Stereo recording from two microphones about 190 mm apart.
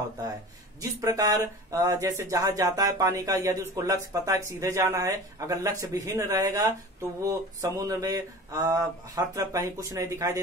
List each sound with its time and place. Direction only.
0.7 s speech: 20° right (ahead or behind)